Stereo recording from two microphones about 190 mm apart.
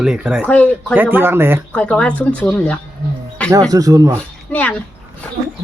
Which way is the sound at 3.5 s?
20° right (ahead or behind).